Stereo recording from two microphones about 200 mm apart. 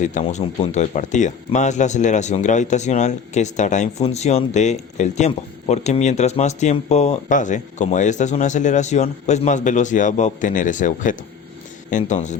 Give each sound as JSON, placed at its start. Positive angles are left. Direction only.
{"t": 0.0, "sound": "speech", "side_deg": 35}